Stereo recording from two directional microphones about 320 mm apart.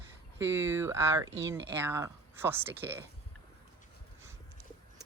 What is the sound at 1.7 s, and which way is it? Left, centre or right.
Speech, centre.